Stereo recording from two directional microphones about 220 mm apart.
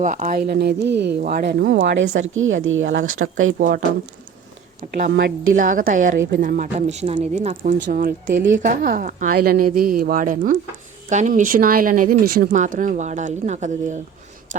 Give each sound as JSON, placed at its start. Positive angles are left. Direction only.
{"t": 0.0, "sound": "speech", "side_deg": -35}
{"t": 3.6, "sound": "a woman's voice", "side_deg": -35}
{"t": 4.9, "sound": "a woman's voice", "side_deg": -40}